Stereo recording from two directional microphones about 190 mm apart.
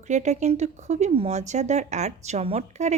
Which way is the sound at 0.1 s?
40° right (ahead or behind).